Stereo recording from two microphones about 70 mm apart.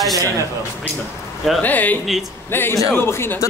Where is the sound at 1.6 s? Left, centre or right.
Left.